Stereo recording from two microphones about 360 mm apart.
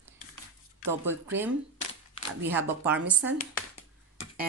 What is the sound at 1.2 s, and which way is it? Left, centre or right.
Speech, centre.